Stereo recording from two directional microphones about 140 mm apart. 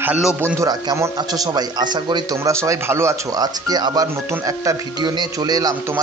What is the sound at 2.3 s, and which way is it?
Speech, 20° right (ahead or behind).